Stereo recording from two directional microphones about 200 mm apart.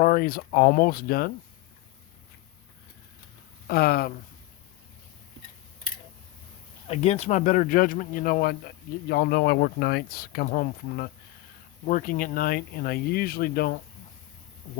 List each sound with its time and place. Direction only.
0.0 s speech: 45° left (ahead or behind)
3.7 s speech: 50° left (ahead or behind)
6.8 s speech: 30° left (ahead or behind); by 13.7 s 50° left (ahead or behind)